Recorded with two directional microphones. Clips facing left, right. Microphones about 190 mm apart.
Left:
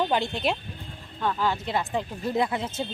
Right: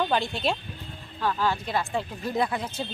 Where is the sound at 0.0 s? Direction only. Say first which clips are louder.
Left 1 dB; 20° left (ahead or behind).